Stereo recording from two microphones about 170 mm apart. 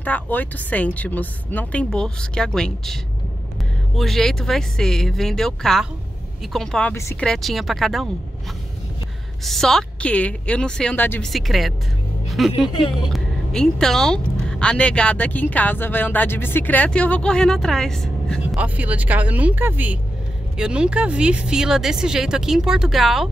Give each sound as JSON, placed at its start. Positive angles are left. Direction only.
{"t": 0.0, "sound": "speech", "side_deg": 10}
{"t": 7.2, "sound": "speech", "side_deg": 0}
{"t": 9.4, "sound": "speech", "side_deg": 0}
{"t": 12.6, "sound": "speech", "side_deg": 30}
{"t": 13.1, "sound": "speech", "side_deg": 5}
{"t": 18.4, "sound": "speech", "side_deg": -10}